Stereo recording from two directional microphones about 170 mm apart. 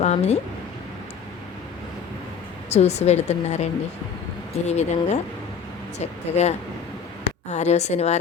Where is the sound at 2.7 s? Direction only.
40° left (ahead or behind).